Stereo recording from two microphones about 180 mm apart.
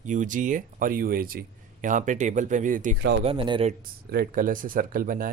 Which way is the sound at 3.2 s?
30° right (ahead or behind).